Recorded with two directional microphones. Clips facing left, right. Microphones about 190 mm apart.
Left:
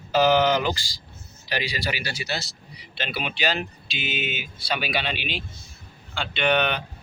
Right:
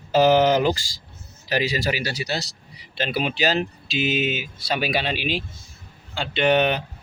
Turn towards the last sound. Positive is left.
turn(degrees=-35)  # may be behind; listen again after turning